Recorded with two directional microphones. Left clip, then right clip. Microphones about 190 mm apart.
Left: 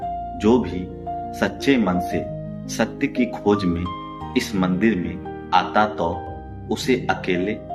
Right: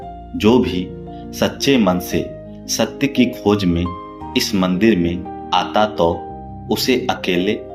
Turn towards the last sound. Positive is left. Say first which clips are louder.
# right 4 dB
turn(degrees=-35)  # may be behind; listen again after turning